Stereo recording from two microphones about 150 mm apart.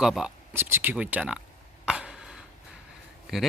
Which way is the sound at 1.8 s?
5° right (ahead or behind).